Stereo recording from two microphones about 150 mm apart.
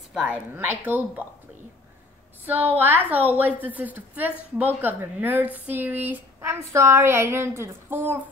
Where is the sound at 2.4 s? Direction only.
10° right (ahead or behind).